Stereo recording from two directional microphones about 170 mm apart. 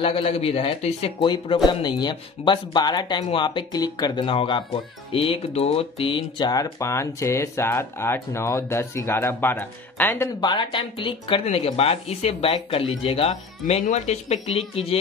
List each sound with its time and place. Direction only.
0.0 s speech: 35° left (ahead or behind); by 10.3 s 15° left (ahead or behind)
10.4 s speech: 25° left (ahead or behind)